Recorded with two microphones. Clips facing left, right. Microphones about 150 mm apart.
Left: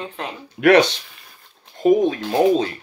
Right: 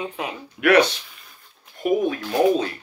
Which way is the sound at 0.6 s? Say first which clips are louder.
Left 3 dB; 30° left (ahead or behind).